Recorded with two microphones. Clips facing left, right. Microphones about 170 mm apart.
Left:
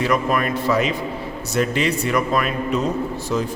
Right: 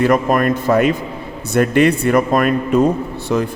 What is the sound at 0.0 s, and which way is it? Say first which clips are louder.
A man's voice: right 6 dB; 45° right (ahead or behind).